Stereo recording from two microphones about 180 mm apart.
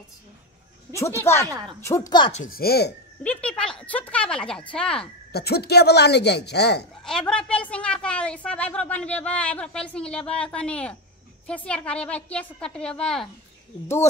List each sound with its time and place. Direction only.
0.9 s speech: 15° left (ahead or behind)
2.5 s speech: 60° left (ahead or behind)
3.3 s a woman's voice: 5° left (ahead or behind)
5.3 s speech: 65° left (ahead or behind)
7.1 s a woman's voice: 5° left (ahead or behind)